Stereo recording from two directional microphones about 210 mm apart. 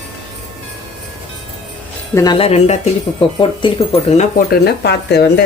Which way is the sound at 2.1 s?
20° left (ahead or behind).